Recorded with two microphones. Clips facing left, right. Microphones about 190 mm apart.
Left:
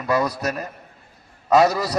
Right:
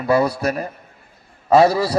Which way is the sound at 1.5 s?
30° right (ahead or behind).